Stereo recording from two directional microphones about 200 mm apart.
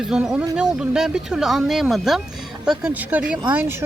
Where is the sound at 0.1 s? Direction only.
5° right (ahead or behind).